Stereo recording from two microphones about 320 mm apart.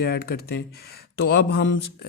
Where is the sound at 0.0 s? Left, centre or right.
Left.